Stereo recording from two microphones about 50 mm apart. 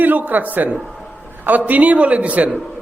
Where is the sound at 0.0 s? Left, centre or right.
Right.